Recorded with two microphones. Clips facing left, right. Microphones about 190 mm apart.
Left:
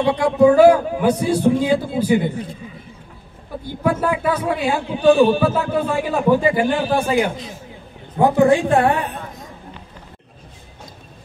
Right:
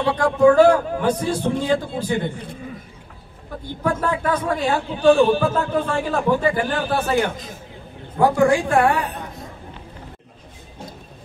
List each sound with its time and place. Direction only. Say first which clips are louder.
0.0 s a man's voice: left 1 dB; 10° left (ahead or behind)
3.6 s a man's voice: left 3 dB; 10° left (ahead or behind)
8.2 s a woman's voice: left 2 dB; 25° left (ahead or behind)